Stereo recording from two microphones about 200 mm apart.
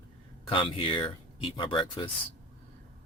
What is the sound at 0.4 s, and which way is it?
Speech, 25° left (ahead or behind).